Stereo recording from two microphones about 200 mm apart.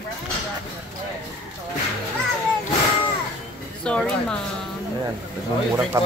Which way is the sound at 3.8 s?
5° left (ahead or behind).